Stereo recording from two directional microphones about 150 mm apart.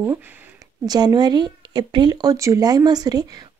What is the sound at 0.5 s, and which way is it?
Speech, 25° right (ahead or behind).